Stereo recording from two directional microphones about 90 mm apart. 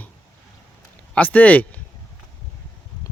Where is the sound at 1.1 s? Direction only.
15° left (ahead or behind).